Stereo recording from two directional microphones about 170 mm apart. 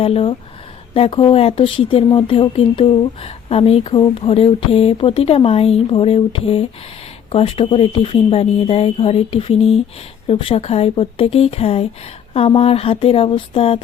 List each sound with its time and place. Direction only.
0.0 s speech: 30° left (ahead or behind)